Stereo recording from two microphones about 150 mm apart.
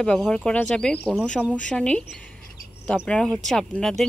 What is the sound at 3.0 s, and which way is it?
Speech, 5° left (ahead or behind).